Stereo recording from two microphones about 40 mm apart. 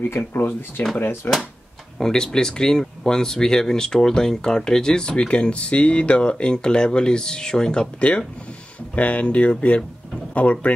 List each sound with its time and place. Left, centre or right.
0.1 s speech: left
0.9 s speech: left
2.0 s speech: centre
8.9 s speech: left